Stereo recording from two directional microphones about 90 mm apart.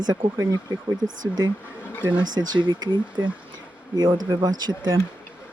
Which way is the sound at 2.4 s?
55° right (ahead or behind).